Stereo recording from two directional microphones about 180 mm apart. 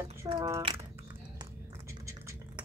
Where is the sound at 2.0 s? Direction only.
15° right (ahead or behind).